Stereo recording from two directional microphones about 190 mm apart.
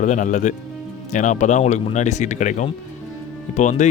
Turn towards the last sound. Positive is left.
turn(degrees=40)  # may be behind; listen again after turning